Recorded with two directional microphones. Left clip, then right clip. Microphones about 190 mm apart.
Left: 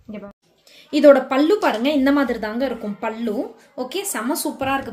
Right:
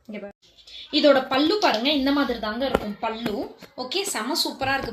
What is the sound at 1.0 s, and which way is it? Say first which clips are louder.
A woman's voice: left 6 dB; 55° left (ahead or behind).